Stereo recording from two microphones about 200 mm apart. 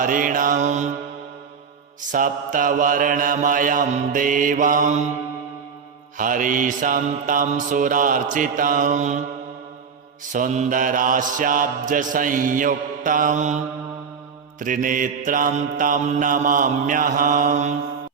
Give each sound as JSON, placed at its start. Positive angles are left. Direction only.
{"t": 0.0, "sound": "mantra", "side_deg": -40}
{"t": 2.1, "sound": "mantra", "side_deg": -40}
{"t": 6.1, "sound": "mantra", "side_deg": -40}
{"t": 10.3, "sound": "mantra", "side_deg": -40}
{"t": 14.6, "sound": "mantra", "side_deg": -40}